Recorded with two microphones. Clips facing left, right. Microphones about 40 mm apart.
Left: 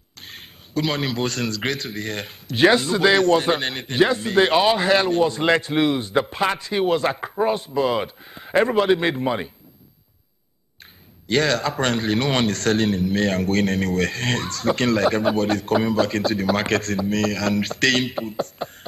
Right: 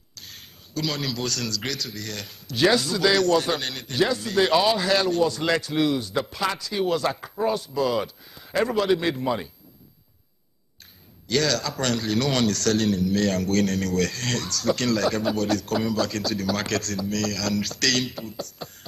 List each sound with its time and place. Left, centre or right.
0.1 s a man's voice: left
11.2 s a man's voice: left